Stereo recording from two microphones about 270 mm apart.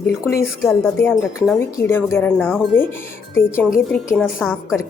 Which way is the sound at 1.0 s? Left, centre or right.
Centre.